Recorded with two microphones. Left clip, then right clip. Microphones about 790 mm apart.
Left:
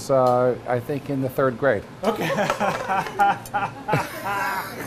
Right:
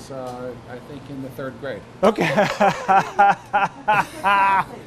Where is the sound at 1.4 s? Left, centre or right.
Left.